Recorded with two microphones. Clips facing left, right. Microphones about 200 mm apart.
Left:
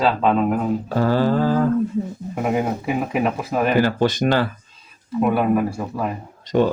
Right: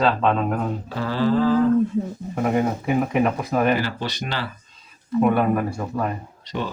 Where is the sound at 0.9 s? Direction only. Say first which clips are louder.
Left 3 dB; 45° left (ahead or behind).